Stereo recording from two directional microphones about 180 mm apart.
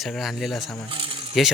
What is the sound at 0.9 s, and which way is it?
Coin, 30° right (ahead or behind).